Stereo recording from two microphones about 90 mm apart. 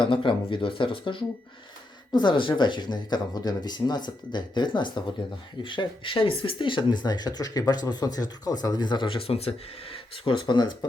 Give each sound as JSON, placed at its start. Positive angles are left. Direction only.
{"t": 0.0, "sound": "speech", "side_deg": 70}
{"t": 9.0, "sound": "speech", "side_deg": 90}